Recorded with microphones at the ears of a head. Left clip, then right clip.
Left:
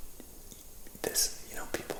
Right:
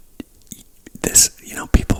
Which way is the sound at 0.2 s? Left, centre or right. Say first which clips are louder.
Right 17 dB; right.